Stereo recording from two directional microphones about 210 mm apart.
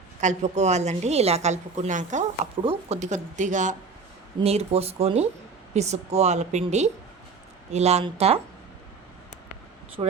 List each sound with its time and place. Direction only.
0.2 s a woman's voice: 35° right (ahead or behind)
10.0 s speech: 20° right (ahead or behind)